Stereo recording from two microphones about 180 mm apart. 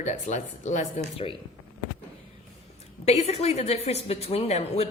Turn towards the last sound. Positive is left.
turn(degrees=35)  # may be behind; listen again after turning